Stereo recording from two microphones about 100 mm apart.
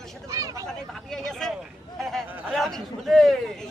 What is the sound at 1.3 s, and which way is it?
A man's voice, 5° left (ahead or behind).